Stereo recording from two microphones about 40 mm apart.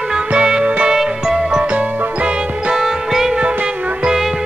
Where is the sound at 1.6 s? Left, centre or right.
Right.